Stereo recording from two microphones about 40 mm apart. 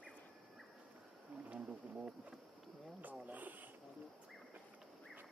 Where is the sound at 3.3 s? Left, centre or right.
Right.